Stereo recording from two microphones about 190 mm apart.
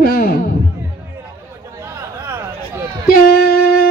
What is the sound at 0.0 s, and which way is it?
Music, 50° left (ahead or behind).